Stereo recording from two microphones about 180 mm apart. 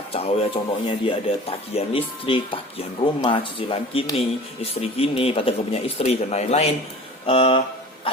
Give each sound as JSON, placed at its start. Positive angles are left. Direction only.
{"t": 0.1, "sound": "speech", "side_deg": 35}